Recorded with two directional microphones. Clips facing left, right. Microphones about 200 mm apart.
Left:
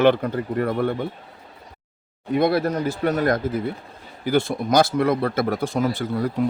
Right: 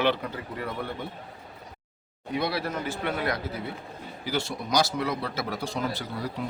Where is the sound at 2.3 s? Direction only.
50° left (ahead or behind).